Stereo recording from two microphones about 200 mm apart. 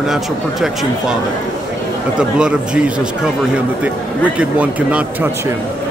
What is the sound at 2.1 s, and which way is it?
Speech, 5° right (ahead or behind).